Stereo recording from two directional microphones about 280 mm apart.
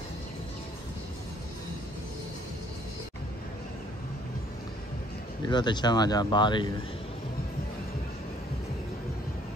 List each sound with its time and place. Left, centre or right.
5.5 s speech: centre